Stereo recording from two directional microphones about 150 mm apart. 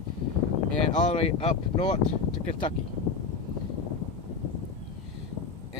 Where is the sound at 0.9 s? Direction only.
45° left (ahead or behind).